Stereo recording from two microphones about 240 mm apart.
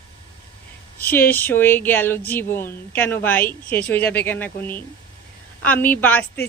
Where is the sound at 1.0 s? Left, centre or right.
Centre.